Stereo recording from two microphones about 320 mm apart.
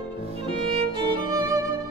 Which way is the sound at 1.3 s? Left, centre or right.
Centre.